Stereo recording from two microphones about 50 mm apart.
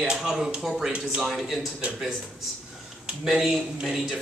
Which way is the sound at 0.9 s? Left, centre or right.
Centre.